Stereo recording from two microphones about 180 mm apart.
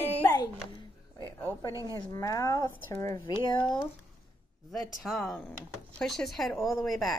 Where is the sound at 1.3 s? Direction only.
10° left (ahead or behind).